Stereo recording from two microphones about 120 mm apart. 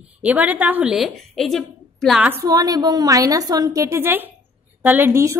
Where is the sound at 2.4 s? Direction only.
30° right (ahead or behind).